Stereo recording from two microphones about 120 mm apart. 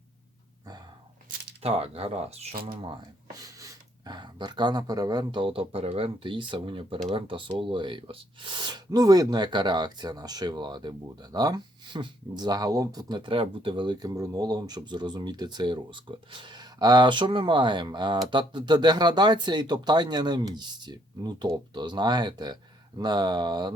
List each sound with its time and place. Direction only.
1.6 s speech: 55° right (ahead or behind)
2.9 s speech: 30° right (ahead or behind)